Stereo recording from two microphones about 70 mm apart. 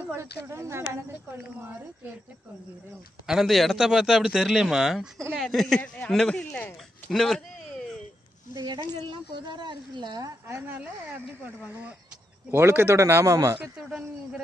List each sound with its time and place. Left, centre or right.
0.1 s a woman's voice: right
3.3 s a man's voice: centre
5.8 s speech: centre
7.1 s a man's voice: centre
8.5 s a woman's voice: right
10.5 s speech: right
12.4 s a woman's voice: right